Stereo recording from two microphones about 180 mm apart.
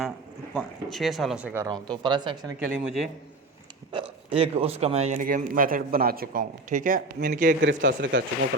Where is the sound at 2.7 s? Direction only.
Centre (ahead or behind).